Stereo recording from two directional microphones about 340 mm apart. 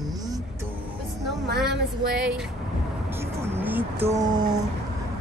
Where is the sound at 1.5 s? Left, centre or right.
Right.